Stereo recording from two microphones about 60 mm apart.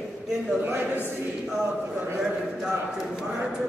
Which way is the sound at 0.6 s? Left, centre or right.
Right.